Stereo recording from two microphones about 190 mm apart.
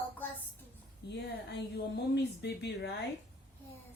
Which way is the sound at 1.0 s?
60° left (ahead or behind).